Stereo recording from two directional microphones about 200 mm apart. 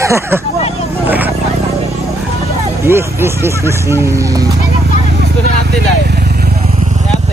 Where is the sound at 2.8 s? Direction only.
10° right (ahead or behind).